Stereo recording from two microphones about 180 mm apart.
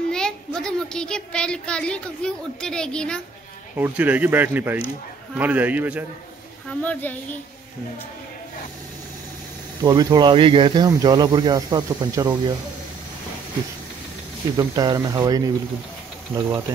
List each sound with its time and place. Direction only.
0.1 s a child's voice: 5° left (ahead or behind)
3.7 s speech: 10° right (ahead or behind)
6.7 s a woman's voice: 10° left (ahead or behind)
9.8 s speech: 25° right (ahead or behind)
14.6 s speech: 20° right (ahead or behind)